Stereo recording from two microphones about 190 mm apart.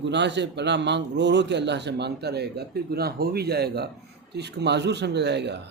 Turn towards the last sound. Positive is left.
turn(degrees=-60)  # may be behind; listen again after turning